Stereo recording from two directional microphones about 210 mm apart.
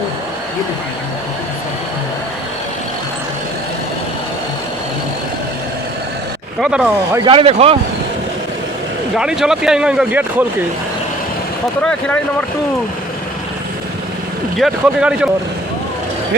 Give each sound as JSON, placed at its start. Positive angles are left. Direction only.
{"t": 6.6, "sound": "speech", "side_deg": -5}
{"t": 7.2, "sound": "speech", "side_deg": -25}
{"t": 9.1, "sound": "speech", "side_deg": 0}
{"t": 11.8, "sound": "speech", "side_deg": 5}
{"t": 14.5, "sound": "speech", "side_deg": 0}